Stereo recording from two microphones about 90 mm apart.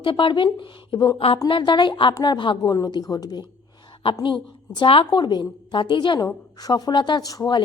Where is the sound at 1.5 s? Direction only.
60° left (ahead or behind).